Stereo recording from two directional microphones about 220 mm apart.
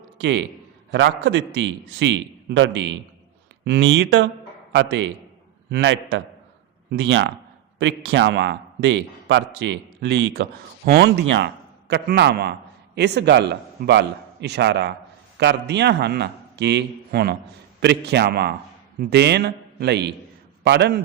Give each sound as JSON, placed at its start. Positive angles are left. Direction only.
{"t": 0.2, "sound": "a man's voice", "side_deg": -55}